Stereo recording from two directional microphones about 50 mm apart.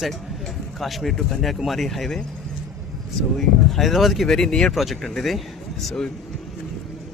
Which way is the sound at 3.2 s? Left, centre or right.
Centre.